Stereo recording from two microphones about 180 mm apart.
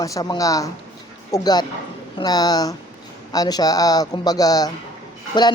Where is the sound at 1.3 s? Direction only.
20° left (ahead or behind).